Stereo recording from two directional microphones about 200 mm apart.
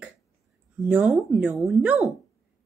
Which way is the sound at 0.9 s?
5° right (ahead or behind).